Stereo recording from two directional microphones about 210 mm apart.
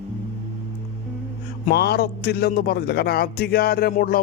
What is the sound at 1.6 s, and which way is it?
Speech, 50° left (ahead or behind).